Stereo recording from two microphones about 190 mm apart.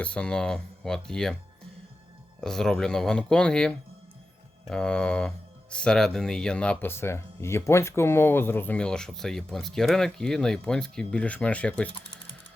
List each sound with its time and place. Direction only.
0.0 s speech: 5° left (ahead or behind)
2.4 s speech: centre (ahead or behind)